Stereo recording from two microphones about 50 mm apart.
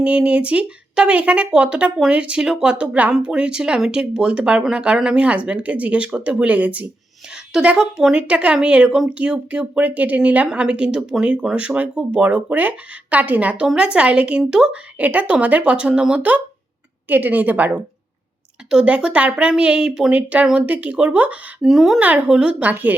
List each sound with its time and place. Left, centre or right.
0.0 s speech: right
7.3 s a woman's voice: centre; by 13.6 s right
13.7 s speech: right
14.9 s speech: right
17.1 s a woman's voice: right
18.7 s a woman's voice: centre
21.6 s a woman's voice: centre
22.0 s speech: right
22.3 s speech: centre
22.6 s a woman's voice: right